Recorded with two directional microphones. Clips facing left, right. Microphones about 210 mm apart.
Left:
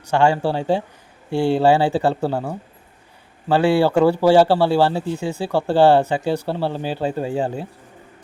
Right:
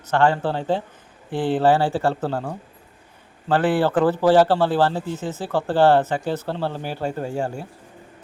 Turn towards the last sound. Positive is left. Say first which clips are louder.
# left 3 dB
turn(degrees=15)  # may be behind; listen again after turning